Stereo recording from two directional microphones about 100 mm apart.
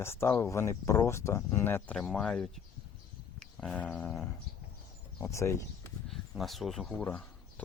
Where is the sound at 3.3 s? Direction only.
5° left (ahead or behind).